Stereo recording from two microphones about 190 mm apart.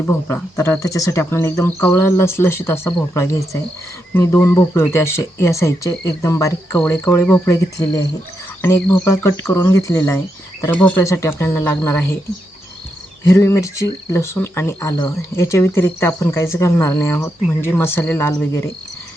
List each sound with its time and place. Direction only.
0.0 s speech: 10° left (ahead or behind)
13.2 s speech: 15° left (ahead or behind)